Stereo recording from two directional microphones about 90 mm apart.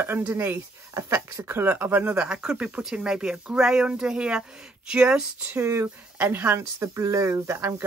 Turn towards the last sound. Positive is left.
turn(degrees=-35)  # may be behind; listen again after turning